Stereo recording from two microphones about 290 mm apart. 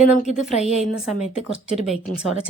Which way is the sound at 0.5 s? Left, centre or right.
Left.